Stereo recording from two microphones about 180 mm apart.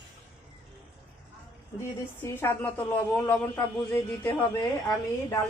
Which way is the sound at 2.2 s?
15° left (ahead or behind).